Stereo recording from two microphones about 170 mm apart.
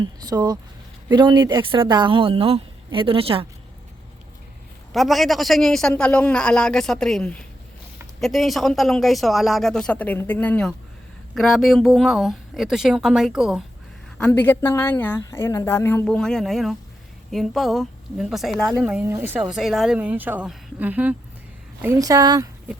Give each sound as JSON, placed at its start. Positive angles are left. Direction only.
{"t": 0.0, "sound": "speech", "side_deg": -25}
{"t": 4.9, "sound": "a man's voice", "side_deg": 0}
{"t": 14.2, "sound": "a man's voice", "side_deg": 10}